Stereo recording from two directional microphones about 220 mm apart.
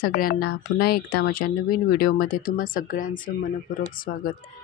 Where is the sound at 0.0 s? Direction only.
40° left (ahead or behind).